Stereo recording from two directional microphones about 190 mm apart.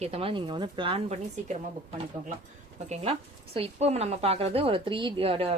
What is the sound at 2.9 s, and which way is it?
Speech, 35° right (ahead or behind).